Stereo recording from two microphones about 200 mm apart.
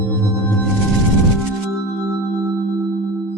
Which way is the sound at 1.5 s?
Centre (ahead or behind).